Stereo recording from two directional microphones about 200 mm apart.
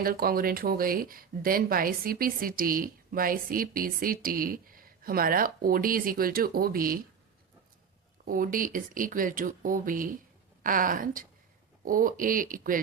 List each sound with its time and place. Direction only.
0.0 s speech: 50° right (ahead or behind)
8.2 s speech: 45° right (ahead or behind)